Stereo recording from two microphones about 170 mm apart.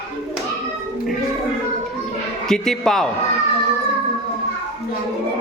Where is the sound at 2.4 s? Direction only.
5° left (ahead or behind).